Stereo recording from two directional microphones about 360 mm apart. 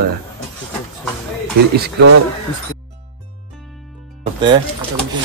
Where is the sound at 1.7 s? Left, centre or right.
Right.